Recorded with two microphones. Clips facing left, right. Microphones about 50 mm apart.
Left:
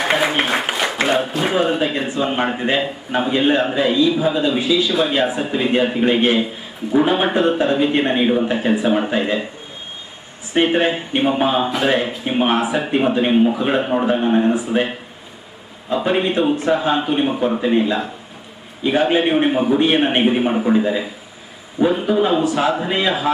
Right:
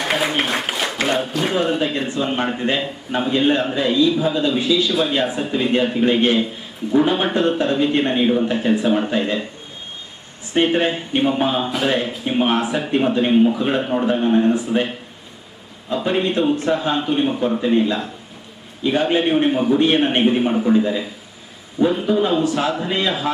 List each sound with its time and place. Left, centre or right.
0.0 s applause: centre
1.4 s speech: centre
10.5 s speech: centre